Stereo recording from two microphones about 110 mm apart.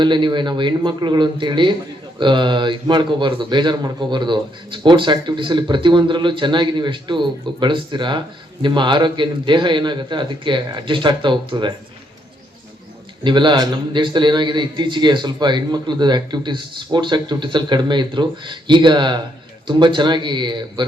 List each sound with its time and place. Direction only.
0.0 s a man's voice: 45° right (ahead or behind)
13.2 s a man's voice: 45° right (ahead or behind)